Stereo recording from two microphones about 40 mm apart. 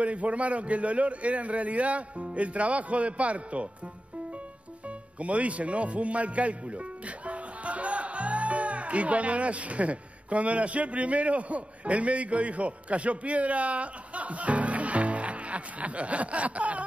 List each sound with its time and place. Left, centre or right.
0.0 s a man's voice: right
4.8 s a man's voice: right